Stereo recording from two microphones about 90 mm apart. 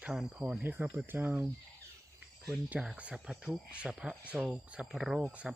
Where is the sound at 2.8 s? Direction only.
10° right (ahead or behind).